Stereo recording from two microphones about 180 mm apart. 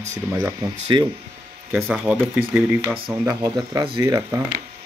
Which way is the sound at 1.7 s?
5° right (ahead or behind).